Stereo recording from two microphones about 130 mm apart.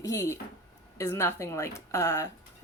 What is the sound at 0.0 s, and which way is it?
Speech, 20° left (ahead or behind).